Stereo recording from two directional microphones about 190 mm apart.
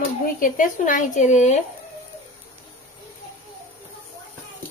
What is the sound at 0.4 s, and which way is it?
Speech, 45° left (ahead or behind).